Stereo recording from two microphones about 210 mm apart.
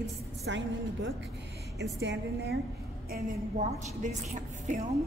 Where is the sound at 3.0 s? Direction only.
40° right (ahead or behind).